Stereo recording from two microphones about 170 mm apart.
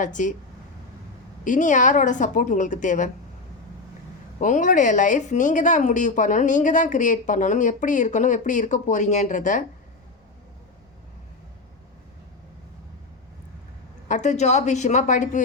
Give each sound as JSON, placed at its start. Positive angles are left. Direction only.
{"t": 0.0, "sound": "speech", "side_deg": 50}
{"t": 1.5, "sound": "speech", "side_deg": 45}
{"t": 4.4, "sound": "speech", "side_deg": 45}
{"t": 14.1, "sound": "speech", "side_deg": 45}